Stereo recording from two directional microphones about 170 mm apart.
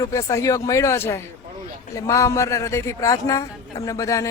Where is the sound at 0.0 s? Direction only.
20° left (ahead or behind).